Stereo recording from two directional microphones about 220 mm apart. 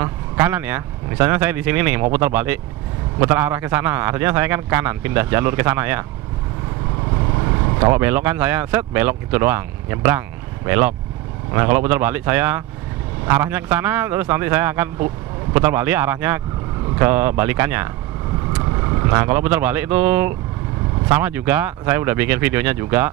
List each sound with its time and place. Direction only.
0.0 s speech: 10° right (ahead or behind)
7.3 s vehicle: 25° right (ahead or behind)
7.9 s speech: 10° right (ahead or behind)
18.9 s speech: 15° right (ahead or behind)